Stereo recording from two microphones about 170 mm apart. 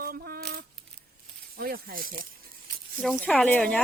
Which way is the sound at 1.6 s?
60° right (ahead or behind).